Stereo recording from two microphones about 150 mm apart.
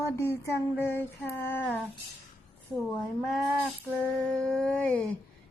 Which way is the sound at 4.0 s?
5° left (ahead or behind).